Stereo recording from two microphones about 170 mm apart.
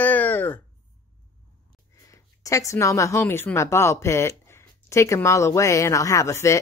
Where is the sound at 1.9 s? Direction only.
20° left (ahead or behind).